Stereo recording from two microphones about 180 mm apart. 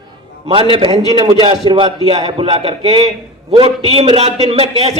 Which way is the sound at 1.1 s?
20° right (ahead or behind).